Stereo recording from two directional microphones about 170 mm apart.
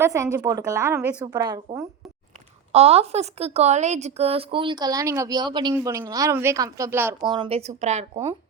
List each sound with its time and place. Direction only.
0.0 s a woman's voice: 15° right (ahead or behind)
2.7 s a woman's voice: 35° right (ahead or behind); by 7.2 s 15° right (ahead or behind)
7.2 s a woman's voice: 25° right (ahead or behind)